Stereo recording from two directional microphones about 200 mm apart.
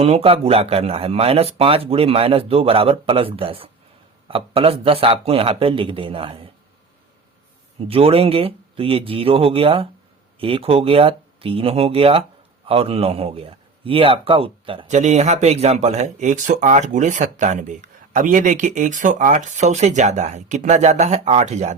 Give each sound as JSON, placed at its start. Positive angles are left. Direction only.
{"t": 0.0, "sound": "speech", "side_deg": -30}
{"t": 7.9, "sound": "speech", "side_deg": -30}